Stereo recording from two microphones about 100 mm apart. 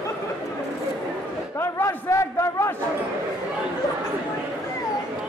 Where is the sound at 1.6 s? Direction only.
25° left (ahead or behind).